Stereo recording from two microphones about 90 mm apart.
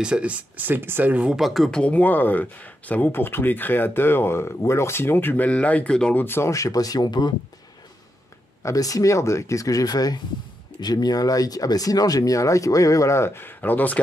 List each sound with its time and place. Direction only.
0.0 s speech: 10° right (ahead or behind)
1.3 s speech: centre (ahead or behind)
1.8 s speech: 15° left (ahead or behind)
6.2 s speech: 30° left (ahead or behind); by 7.3 s 50° left (ahead or behind)
8.6 s speech: 40° left (ahead or behind); by 13.9 s 20° left (ahead or behind)